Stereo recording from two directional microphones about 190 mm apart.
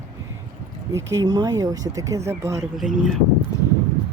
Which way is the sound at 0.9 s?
15° right (ahead or behind).